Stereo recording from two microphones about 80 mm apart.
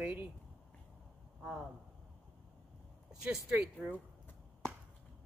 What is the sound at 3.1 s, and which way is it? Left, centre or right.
Speech, centre.